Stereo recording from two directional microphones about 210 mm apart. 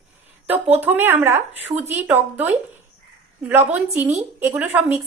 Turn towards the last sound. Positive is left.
turn(degrees=-10)  # may be behind; listen again after turning